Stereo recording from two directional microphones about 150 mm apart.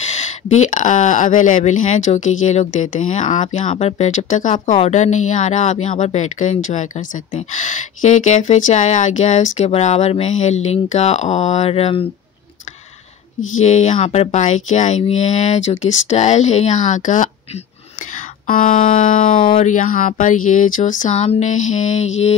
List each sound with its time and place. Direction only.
0.0 s speech: 50° left (ahead or behind)
13.6 s speech: 50° left (ahead or behind)
18.5 s speech: 65° left (ahead or behind)